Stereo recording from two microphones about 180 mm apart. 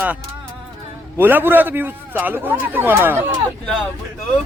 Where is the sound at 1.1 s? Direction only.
10° right (ahead or behind).